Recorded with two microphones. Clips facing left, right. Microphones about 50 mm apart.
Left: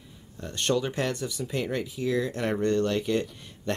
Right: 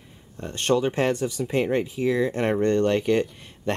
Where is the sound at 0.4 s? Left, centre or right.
Right.